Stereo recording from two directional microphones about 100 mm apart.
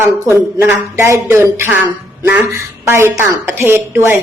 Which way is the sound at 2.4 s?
25° right (ahead or behind).